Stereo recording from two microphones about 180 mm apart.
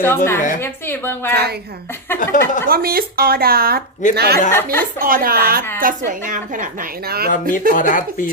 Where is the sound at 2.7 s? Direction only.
55° right (ahead or behind).